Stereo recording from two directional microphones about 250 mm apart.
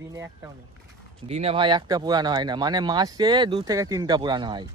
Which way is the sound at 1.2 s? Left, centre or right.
Right.